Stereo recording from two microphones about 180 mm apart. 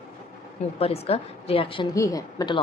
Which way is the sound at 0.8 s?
35° left (ahead or behind).